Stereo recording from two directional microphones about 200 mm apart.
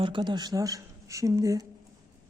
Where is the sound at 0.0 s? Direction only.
25° right (ahead or behind).